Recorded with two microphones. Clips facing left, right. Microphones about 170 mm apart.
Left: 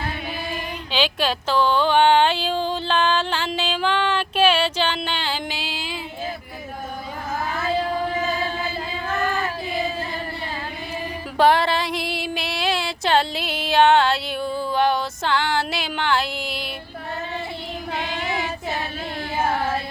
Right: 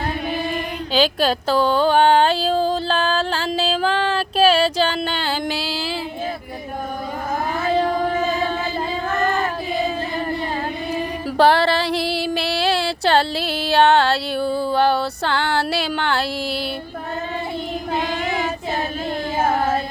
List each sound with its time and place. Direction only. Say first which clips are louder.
0.9 s a sound: right 5 dB; 40° right (ahead or behind)
9.2 s child singing: right 4 dB; 45° right (ahead or behind)
11.3 s female singing: right 2 dB; 35° right (ahead or behind)
18.0 s child singing: right 4 dB; 40° right (ahead or behind)
19.4 s carnatic music: right 3 dB; 45° right (ahead or behind)